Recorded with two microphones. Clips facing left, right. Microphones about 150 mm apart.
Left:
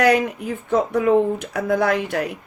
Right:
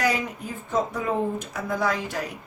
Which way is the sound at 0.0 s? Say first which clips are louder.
Left 8 dB; 65° left (ahead or behind).